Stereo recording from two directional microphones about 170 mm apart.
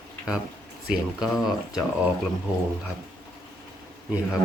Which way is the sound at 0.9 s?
Centre (ahead or behind).